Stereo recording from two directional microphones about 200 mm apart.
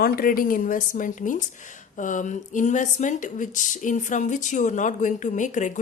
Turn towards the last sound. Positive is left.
turn(degrees=40)  # may be behind; listen again after turning